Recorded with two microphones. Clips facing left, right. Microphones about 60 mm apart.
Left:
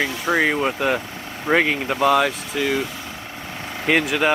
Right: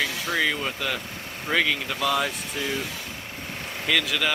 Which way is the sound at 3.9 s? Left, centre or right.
Left.